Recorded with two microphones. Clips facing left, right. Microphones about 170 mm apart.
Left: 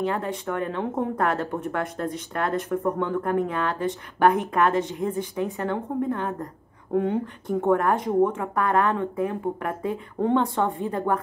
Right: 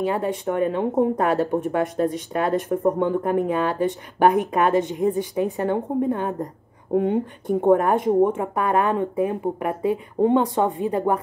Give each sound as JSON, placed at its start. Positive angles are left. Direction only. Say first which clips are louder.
{"t": 0.0, "sound": "speech", "louder": "right 4 dB", "side_deg": -15}